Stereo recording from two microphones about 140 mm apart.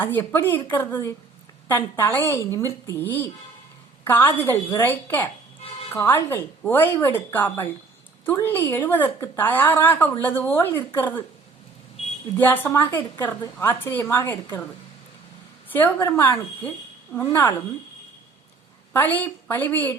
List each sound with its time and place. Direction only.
0.0 s speech: 15° left (ahead or behind)
12.4 s speech: 15° left (ahead or behind)
15.7 s speech: 15° left (ahead or behind)
18.9 s speech: 15° left (ahead or behind)